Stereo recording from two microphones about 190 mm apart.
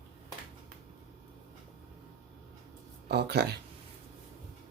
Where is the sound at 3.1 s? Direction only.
60° right (ahead or behind).